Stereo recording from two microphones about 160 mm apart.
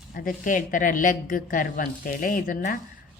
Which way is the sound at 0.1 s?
65° left (ahead or behind).